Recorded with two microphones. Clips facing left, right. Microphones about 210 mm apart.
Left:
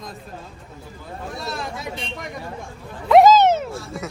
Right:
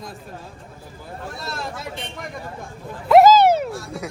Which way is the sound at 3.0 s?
Centre (ahead or behind).